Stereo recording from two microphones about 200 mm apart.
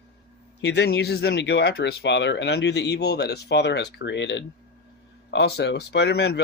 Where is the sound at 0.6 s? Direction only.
60° left (ahead or behind).